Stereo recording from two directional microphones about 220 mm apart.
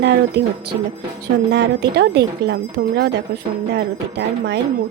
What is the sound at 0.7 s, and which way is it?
Music, 15° right (ahead or behind).